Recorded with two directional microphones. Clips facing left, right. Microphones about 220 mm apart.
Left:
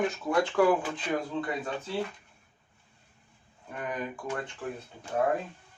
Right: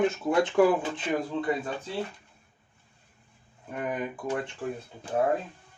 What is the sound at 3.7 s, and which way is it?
Speech, 25° right (ahead or behind).